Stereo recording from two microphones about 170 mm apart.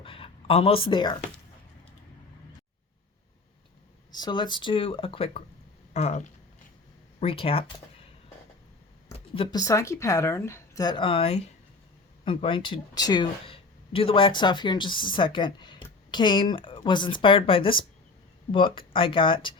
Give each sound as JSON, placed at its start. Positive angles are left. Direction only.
{"t": 0.0, "sound": "a sound", "side_deg": 30}
{"t": 4.1, "sound": "speech", "side_deg": 25}
{"t": 9.1, "sound": "speech", "side_deg": 30}